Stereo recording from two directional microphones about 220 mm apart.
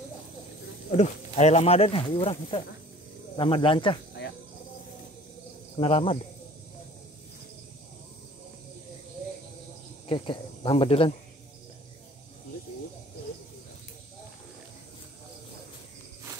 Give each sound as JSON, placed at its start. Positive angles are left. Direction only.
{"t": 0.9, "sound": "speech", "side_deg": 30}
{"t": 5.8, "sound": "speech", "side_deg": 25}
{"t": 10.0, "sound": "speech", "side_deg": 20}